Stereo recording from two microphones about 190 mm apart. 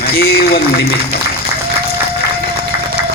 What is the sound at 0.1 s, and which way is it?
Speech, 55° left (ahead or behind).